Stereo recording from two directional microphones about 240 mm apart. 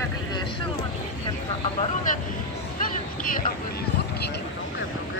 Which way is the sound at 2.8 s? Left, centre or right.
Left.